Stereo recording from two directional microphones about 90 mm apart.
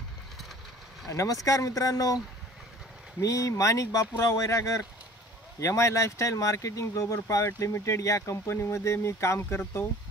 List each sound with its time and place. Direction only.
1.0 s speech: 40° left (ahead or behind)
3.2 s speech: 40° left (ahead or behind)